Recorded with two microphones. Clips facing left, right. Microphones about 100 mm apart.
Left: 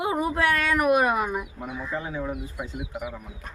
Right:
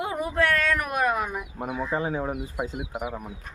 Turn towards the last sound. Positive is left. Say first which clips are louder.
# right 2 dB
turn(degrees=-20)  # may be behind; listen again after turning